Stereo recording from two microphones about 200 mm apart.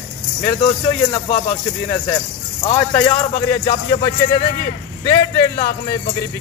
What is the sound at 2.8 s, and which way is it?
Speech, 5° left (ahead or behind).